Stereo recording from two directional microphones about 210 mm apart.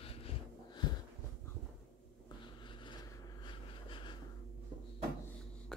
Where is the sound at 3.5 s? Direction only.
25° left (ahead or behind).